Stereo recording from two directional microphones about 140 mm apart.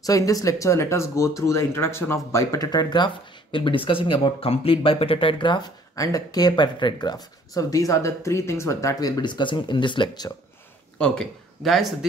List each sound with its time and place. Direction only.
0.0 s speech: 25° left (ahead or behind)
5.9 s speech: 25° left (ahead or behind)
11.0 s speech: 5° left (ahead or behind)